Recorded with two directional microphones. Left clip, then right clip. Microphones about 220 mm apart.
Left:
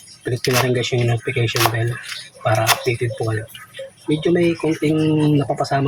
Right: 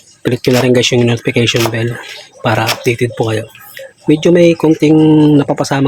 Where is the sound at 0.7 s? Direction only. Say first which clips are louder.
Right 10 dB; 45° right (ahead or behind).